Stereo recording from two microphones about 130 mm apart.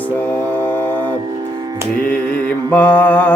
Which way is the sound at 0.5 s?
10° left (ahead or behind).